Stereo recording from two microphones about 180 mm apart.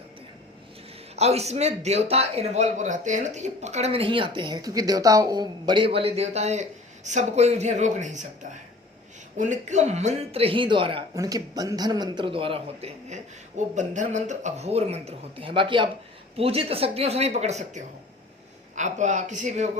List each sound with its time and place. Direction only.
1.1 s a man's voice: 35° right (ahead or behind)